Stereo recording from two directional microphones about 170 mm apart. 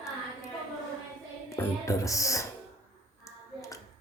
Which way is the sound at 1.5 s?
20° left (ahead or behind).